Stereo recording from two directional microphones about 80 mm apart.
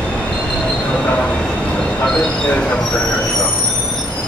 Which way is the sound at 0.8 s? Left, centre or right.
Centre.